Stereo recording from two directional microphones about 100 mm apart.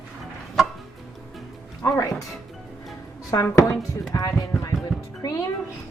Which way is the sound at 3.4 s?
30° left (ahead or behind).